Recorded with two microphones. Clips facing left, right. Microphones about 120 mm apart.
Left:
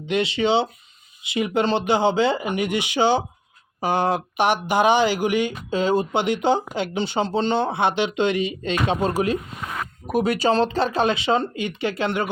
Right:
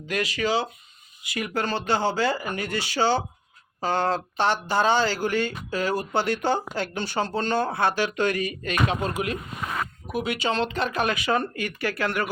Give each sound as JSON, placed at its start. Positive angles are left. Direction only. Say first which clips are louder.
{"t": 0.1, "sound": "speech", "louder": "left 5 dB", "side_deg": 25}
{"t": 10.1, "sound": "speech", "louder": "left 8 dB", "side_deg": 45}